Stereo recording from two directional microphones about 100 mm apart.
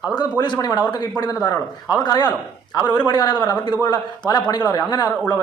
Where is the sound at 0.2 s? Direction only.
45° left (ahead or behind).